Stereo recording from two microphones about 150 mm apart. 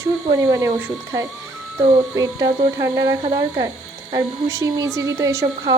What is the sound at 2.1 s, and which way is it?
Speech, 20° right (ahead or behind).